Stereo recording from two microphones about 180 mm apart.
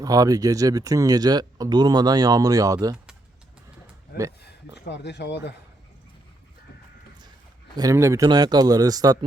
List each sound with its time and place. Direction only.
0.0 s speech: 20° right (ahead or behind)
4.9 s speech: 70° left (ahead or behind)
7.8 s speech: 15° right (ahead or behind)